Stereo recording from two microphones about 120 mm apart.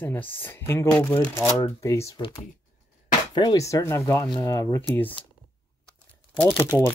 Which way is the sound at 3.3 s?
35° left (ahead or behind).